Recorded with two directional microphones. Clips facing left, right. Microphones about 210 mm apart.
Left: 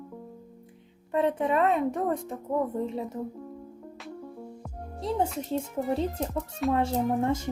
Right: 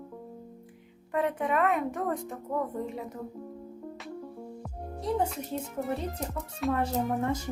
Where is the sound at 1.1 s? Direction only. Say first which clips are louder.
Left 3 dB; 25° left (ahead or behind).